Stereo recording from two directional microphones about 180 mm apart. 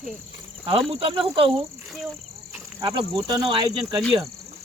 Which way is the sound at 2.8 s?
25° right (ahead or behind).